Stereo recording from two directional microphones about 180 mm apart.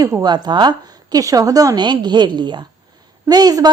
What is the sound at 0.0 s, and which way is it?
A woman's voice, 20° right (ahead or behind).